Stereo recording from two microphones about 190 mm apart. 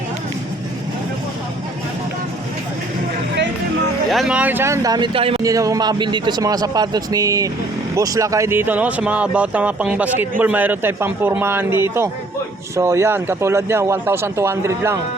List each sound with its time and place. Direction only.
4.1 s speech: 5° right (ahead or behind); by 5.4 s 30° right (ahead or behind)
5.4 s a man's voice: 20° right (ahead or behind)